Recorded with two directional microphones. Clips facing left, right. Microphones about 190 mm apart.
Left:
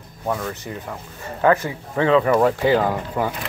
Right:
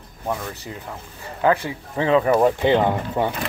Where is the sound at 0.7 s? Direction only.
20° right (ahead or behind).